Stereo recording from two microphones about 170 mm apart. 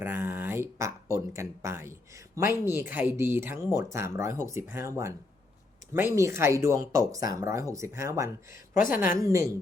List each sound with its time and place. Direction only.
0.0 s speech: 10° right (ahead or behind)
8.7 s a woman's voice: 55° left (ahead or behind)
9.2 s speech: 15° right (ahead or behind)